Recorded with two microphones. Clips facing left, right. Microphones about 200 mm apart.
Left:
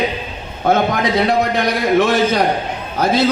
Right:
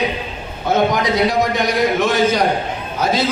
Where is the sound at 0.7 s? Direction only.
55° left (ahead or behind).